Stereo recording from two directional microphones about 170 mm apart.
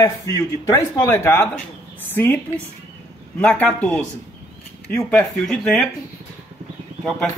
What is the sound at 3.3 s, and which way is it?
Speech, 10° left (ahead or behind).